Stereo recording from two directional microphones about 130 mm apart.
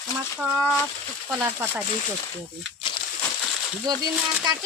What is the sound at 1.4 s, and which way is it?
Speech, 15° right (ahead or behind).